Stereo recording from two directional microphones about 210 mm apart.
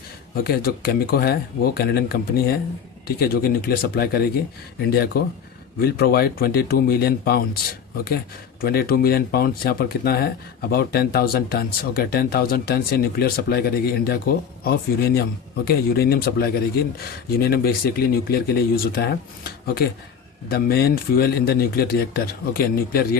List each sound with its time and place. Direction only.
0.4 s speech: 45° left (ahead or behind)